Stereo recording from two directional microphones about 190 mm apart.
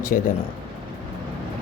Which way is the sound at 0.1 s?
45° left (ahead or behind).